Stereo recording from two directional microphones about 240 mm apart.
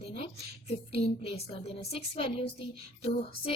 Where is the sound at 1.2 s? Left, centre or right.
Left.